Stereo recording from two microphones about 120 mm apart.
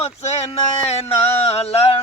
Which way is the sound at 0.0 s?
60° left (ahead or behind).